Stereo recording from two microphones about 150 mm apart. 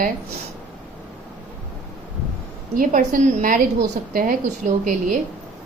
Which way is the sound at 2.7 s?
65° right (ahead or behind).